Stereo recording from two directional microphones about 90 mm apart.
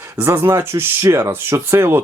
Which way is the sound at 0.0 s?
25° right (ahead or behind).